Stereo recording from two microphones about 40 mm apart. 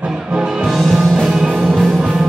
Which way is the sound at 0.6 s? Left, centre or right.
Centre.